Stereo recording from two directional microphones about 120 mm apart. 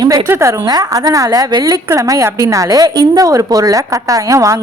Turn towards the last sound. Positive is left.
turn(degrees=-25)  # may be behind; listen again after turning